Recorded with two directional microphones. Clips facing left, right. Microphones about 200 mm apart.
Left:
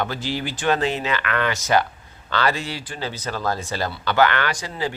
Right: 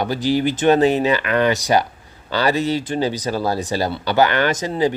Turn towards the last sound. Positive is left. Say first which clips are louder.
# right 8 dB
turn(degrees=-20)  # may be behind; listen again after turning